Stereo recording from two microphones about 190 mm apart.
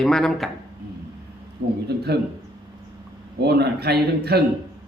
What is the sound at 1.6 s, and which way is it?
Speech, 60° right (ahead or behind).